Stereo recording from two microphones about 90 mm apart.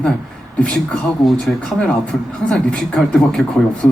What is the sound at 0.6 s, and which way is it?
A man's voice, 10° left (ahead or behind).